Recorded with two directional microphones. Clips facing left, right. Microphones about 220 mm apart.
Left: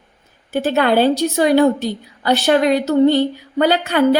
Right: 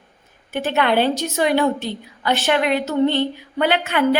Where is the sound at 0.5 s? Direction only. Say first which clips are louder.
Left 4 dB; 35° left (ahead or behind).